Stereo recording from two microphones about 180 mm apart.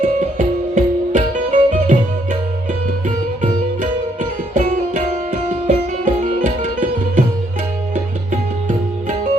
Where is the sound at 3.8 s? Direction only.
45° right (ahead or behind).